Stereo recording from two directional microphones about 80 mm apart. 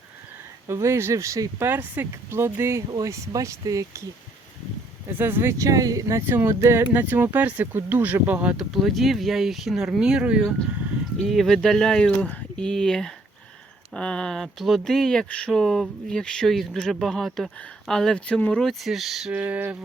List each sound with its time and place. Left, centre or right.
0.7 s speech: right
1.6 s speech: right
2.9 s speech: right
5.1 s speech: right
8.5 s speech: centre
11.3 s speech: centre
18.6 s speech: centre
19.3 s speech: right